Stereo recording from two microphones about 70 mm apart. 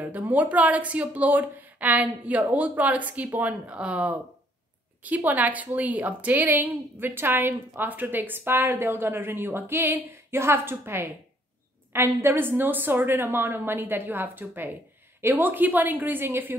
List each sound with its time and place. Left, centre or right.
0.0 s a woman's voice: right